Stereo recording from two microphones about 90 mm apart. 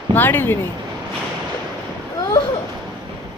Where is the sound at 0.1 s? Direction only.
20° left (ahead or behind).